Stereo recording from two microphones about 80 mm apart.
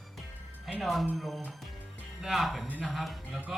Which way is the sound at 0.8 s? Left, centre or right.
Centre.